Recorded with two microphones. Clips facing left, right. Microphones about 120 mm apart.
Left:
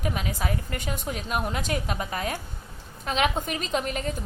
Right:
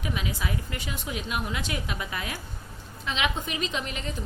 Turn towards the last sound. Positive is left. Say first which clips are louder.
# left 4 dB
turn(degrees=45)  # may be behind; listen again after turning